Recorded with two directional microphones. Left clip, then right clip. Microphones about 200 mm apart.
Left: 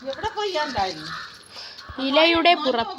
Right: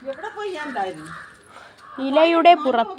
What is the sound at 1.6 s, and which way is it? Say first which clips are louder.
Speech: even; 30° right (ahead or behind).